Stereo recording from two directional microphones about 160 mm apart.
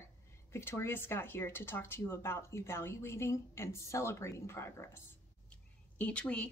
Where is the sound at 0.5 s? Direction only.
15° left (ahead or behind).